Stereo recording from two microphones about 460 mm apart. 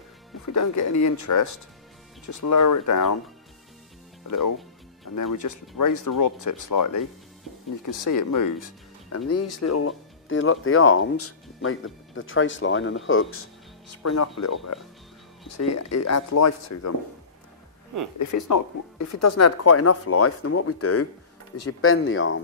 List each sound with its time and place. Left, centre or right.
0.5 s speech: left
4.3 s speech: left
18.2 s speech: left